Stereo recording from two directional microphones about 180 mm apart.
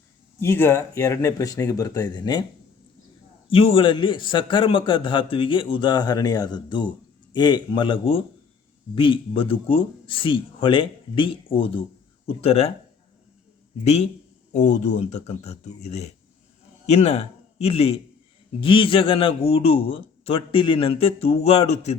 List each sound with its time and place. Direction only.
0.3 s speech: 15° left (ahead or behind)
3.5 s a man's voice: 30° left (ahead or behind)
13.8 s a man's voice: 35° left (ahead or behind)